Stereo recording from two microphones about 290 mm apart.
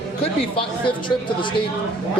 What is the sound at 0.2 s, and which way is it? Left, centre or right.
Speech, centre.